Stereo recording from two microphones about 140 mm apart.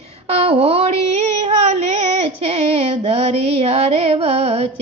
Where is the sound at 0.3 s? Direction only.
45° right (ahead or behind).